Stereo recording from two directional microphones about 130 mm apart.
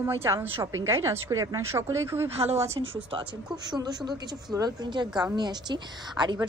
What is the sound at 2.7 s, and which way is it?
Speech, 45° right (ahead or behind).